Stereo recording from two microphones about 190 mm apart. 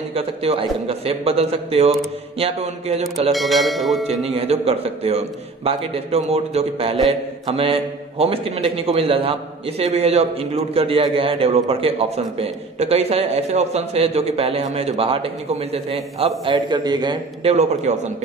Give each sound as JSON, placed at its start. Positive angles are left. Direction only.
{"t": 0.1, "sound": "a man's voice", "side_deg": -30}
{"t": 3.0, "sound": "a sound", "side_deg": 0}
{"t": 4.4, "sound": "a man's voice", "side_deg": -30}